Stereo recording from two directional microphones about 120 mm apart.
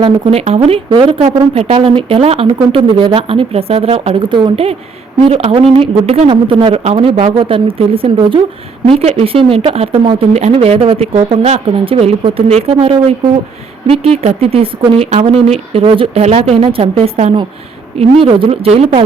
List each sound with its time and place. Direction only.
0.0 s speech: 60° right (ahead or behind)
0.9 s speech: 45° right (ahead or behind)
1.2 s speech: 55° right (ahead or behind)
18.2 s speech: 50° right (ahead or behind)